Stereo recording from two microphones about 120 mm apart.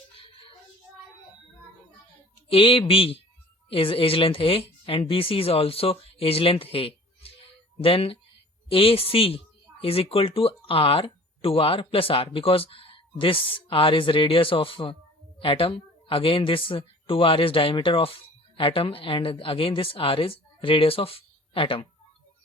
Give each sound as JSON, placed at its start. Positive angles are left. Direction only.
{"t": 2.5, "sound": "speech", "side_deg": 50}